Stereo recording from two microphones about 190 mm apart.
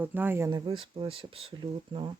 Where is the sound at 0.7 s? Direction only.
25° right (ahead or behind).